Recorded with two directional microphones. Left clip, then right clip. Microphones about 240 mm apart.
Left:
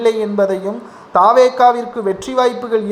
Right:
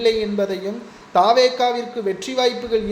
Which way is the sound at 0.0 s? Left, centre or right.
Centre.